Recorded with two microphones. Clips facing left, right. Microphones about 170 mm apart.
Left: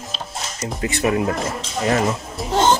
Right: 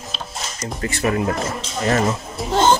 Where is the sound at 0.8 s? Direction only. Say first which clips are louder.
Left 1 dB; 20° left (ahead or behind).